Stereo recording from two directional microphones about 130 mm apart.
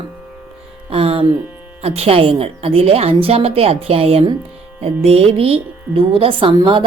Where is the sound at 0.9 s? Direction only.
45° right (ahead or behind).